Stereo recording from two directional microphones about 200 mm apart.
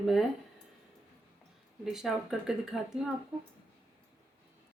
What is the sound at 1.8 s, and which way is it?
A woman's voice, centre (ahead or behind).